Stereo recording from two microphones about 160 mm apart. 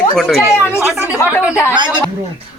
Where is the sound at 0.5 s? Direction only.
15° left (ahead or behind).